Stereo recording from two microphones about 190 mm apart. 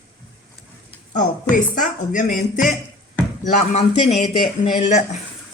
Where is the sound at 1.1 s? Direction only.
40° left (ahead or behind).